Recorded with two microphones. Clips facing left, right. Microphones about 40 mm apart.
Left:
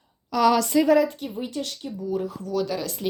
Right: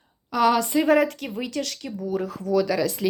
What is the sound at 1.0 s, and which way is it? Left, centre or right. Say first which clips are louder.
Speech: right 2 dB; right.